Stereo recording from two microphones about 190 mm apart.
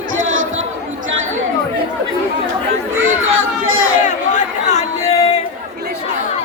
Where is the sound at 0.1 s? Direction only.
90° right.